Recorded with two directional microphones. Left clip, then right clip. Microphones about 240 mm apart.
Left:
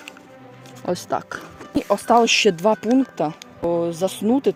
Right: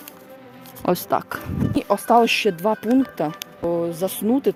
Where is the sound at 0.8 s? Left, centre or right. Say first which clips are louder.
Right 3 dB; centre.